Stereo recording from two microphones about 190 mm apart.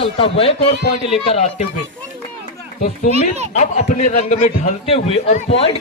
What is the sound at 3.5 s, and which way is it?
A man's voice, 40° left (ahead or behind).